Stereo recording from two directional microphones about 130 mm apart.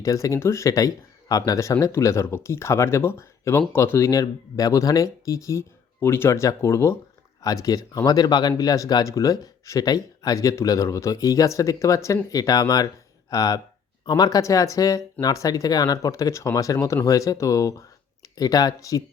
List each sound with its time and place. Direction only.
0.0 s speech: 25° left (ahead or behind)